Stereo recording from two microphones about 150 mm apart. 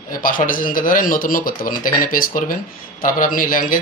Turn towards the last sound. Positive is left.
turn(degrees=70)  # may be behind; listen again after turning